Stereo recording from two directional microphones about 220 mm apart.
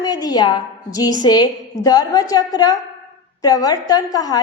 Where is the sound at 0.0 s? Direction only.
15° left (ahead or behind).